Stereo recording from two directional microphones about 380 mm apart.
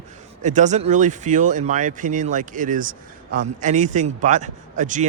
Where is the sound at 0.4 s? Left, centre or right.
Centre.